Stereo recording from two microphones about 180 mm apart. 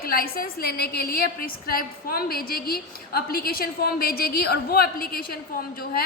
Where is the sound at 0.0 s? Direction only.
55° left (ahead or behind).